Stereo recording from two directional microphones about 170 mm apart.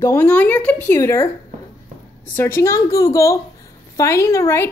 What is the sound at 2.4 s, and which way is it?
A woman's voice, 15° left (ahead or behind).